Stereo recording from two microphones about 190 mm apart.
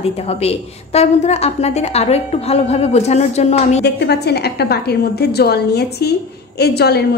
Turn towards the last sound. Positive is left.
turn(degrees=60)  # may be behind; listen again after turning